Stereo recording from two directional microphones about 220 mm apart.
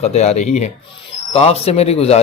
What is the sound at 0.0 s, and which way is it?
A man's voice, 30° left (ahead or behind).